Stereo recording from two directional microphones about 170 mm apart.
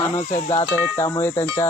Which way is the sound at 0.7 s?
15° left (ahead or behind).